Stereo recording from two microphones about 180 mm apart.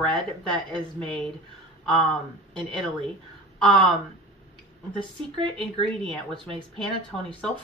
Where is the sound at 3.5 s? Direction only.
Centre (ahead or behind).